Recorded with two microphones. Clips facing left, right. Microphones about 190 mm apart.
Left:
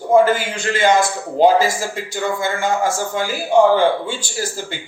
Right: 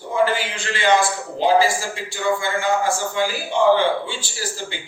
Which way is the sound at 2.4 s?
45° left (ahead or behind).